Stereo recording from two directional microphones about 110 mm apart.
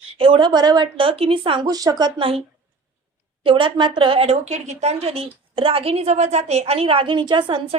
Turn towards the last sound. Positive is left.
turn(degrees=-45)  # may be behind; listen again after turning